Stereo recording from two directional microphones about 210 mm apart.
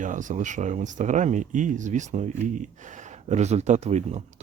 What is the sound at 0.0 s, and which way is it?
Speech, 40° right (ahead or behind).